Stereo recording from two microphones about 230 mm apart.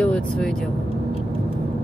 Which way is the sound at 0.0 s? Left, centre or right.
Centre.